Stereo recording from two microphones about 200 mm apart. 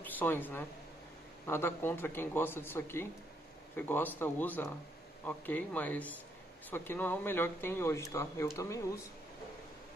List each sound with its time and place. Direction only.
0.0 s speech: 10° left (ahead or behind)